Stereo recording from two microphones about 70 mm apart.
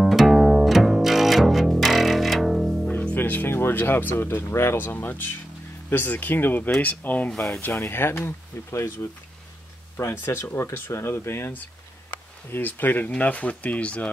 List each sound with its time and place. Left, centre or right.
0.0 s music: centre
2.9 s music: left
4.2 s speech: left
4.8 s speech: left
7.2 s speech: centre
7.6 s speech: left
9.9 s speech: left; by 14.1 s centre